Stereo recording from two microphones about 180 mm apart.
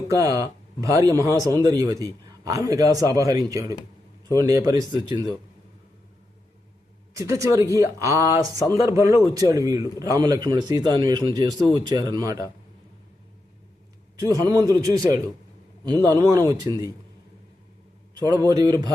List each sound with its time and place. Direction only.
0.1 s a man's voice: 20° right (ahead or behind)
7.2 s a man's voice: 15° right (ahead or behind)
14.2 s a man's voice: 20° right (ahead or behind)
18.2 s a man's voice: 20° right (ahead or behind)